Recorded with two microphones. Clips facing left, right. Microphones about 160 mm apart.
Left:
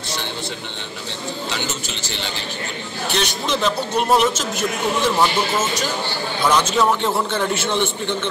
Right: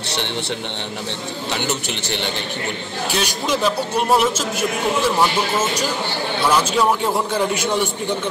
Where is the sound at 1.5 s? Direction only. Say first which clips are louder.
Right 4 dB; 60° right (ahead or behind).